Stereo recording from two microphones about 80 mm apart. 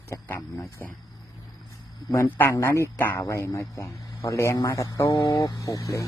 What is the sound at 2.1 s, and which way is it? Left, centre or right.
A man's voice, left.